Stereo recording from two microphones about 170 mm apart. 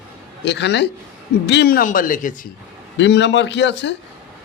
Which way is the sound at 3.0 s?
90° left.